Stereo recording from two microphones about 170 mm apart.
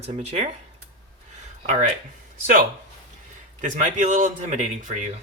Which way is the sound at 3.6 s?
50° right (ahead or behind).